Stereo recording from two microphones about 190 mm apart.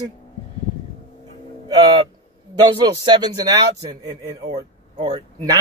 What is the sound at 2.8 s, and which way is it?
Speech, 20° right (ahead or behind).